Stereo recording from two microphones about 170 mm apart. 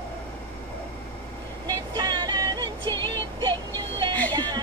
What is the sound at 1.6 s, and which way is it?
Music, 25° right (ahead or behind).